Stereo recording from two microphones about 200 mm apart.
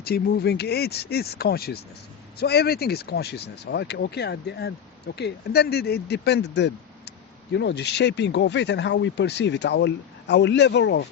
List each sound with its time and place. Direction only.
0.0 s speech: 50° left (ahead or behind)